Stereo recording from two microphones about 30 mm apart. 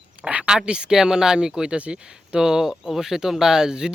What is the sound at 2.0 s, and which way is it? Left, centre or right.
Speech, right.